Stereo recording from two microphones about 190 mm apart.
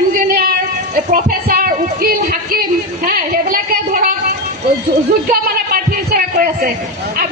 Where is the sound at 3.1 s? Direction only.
50° right (ahead or behind).